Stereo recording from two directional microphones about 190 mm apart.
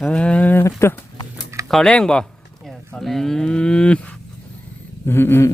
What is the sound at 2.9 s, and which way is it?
Cattle, centre (ahead or behind).